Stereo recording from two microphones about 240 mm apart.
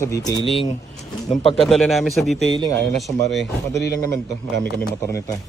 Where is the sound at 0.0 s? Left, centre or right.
Centre.